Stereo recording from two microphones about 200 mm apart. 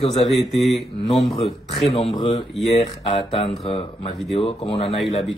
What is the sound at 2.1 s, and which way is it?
Speech, 30° left (ahead or behind).